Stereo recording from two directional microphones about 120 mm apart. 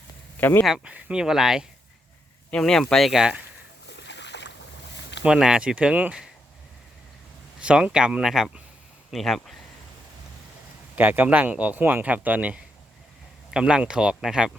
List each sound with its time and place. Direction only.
0.3 s speech: 15° left (ahead or behind)
0.6 s speech: 5° right (ahead or behind)
5.2 s speech: 5° right (ahead or behind)
7.6 s speech: 10° right (ahead or behind)
10.9 s speech: 15° right (ahead or behind)